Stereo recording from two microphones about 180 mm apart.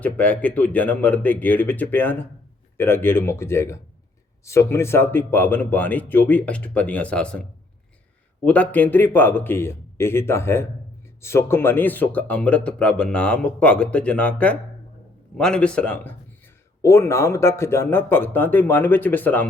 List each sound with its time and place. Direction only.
0.0 s speech: 10° left (ahead or behind)
8.4 s speech: 10° left (ahead or behind)